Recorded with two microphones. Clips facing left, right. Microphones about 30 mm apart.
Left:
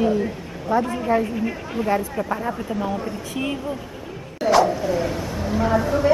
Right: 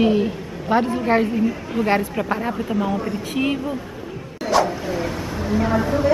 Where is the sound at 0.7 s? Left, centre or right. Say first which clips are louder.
Right 2 dB; right.